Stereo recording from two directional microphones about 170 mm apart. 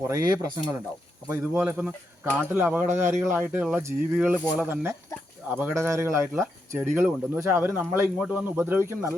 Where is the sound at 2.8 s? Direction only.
45° right (ahead or behind).